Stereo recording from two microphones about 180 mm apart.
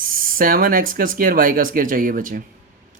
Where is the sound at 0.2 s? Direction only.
50° right (ahead or behind).